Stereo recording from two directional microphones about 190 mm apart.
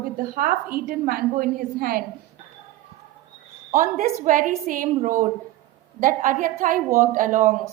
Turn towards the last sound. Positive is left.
turn(degrees=-45)  # may be behind; listen again after turning